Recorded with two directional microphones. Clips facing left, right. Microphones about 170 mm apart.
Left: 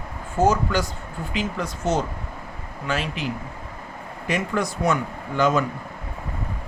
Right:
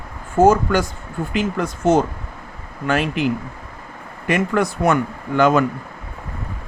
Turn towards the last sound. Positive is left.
turn(degrees=-60)  # may be behind; listen again after turning